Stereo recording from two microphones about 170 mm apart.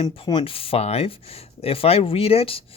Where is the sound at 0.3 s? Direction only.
30° left (ahead or behind).